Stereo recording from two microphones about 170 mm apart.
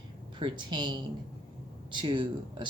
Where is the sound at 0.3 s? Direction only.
30° right (ahead or behind).